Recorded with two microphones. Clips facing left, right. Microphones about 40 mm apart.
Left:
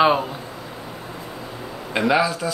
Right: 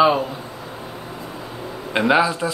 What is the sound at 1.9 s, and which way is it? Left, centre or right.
Speech, centre.